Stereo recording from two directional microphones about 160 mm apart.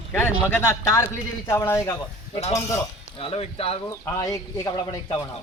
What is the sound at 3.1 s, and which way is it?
Speech, 35° left (ahead or behind).